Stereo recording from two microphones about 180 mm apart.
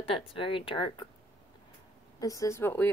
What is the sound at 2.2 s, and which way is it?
Speech, 20° left (ahead or behind).